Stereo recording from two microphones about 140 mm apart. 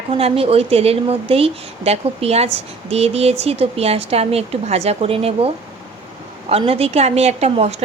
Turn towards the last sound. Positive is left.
turn(degrees=-50)  # may be behind; listen again after turning